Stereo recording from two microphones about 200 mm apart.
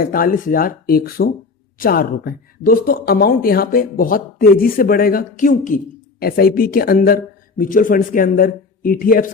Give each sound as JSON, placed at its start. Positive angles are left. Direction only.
{"t": 0.0, "sound": "speech", "side_deg": 45}